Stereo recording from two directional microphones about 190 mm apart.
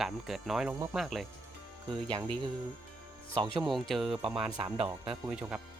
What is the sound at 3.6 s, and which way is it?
Speech, centre (ahead or behind).